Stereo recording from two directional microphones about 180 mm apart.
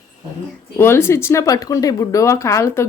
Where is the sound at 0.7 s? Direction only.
15° left (ahead or behind).